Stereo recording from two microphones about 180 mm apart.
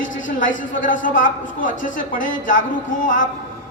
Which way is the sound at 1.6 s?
50° left (ahead or behind).